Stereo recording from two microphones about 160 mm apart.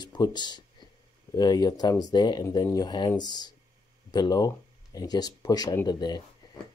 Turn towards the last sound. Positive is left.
turn(degrees=25)  # may be behind; listen again after turning